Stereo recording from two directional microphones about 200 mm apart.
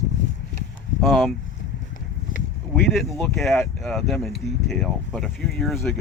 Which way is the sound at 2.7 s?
Centre (ahead or behind).